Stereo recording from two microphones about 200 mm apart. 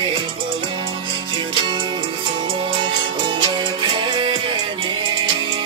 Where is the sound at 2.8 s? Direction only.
25° right (ahead or behind).